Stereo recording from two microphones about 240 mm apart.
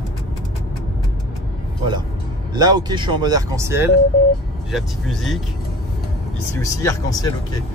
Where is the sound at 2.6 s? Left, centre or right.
Centre.